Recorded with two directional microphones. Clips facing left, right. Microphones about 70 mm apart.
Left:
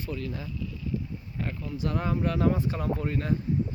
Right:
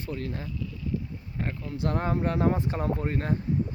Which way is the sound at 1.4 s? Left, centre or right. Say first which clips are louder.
Right 1 dB; right.